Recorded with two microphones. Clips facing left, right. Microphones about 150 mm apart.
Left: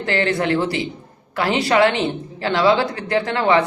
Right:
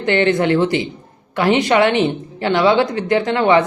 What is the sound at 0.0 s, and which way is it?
A man's voice, 20° right (ahead or behind).